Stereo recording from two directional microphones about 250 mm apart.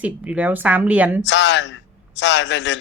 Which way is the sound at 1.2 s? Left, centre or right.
Left.